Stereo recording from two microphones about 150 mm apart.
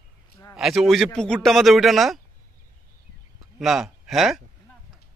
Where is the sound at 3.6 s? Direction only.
Centre (ahead or behind).